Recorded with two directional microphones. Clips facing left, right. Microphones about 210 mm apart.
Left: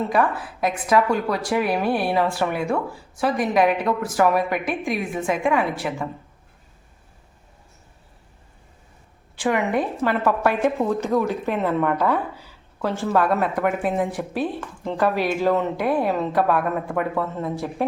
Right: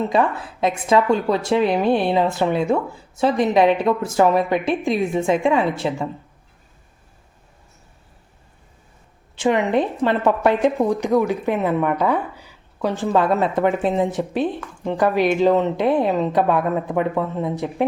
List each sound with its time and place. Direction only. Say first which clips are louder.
0.1 s speech: right 2 dB; 25° right (ahead or behind)
9.3 s speech: right 3 dB; 20° right (ahead or behind)